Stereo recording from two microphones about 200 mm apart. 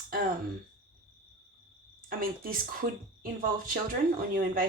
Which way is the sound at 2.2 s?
45° right (ahead or behind).